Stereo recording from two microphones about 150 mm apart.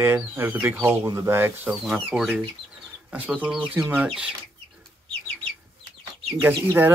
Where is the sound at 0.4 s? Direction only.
15° right (ahead or behind).